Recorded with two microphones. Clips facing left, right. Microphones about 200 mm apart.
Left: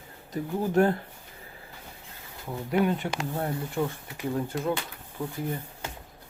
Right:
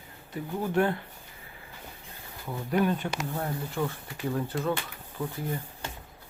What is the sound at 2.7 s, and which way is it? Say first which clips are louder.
Speech: left 1 dB; 20° left (ahead or behind).